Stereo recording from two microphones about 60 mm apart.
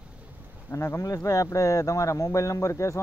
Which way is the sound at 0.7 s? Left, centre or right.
Left.